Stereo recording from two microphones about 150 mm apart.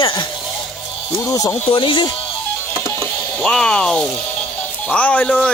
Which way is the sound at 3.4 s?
5° left (ahead or behind).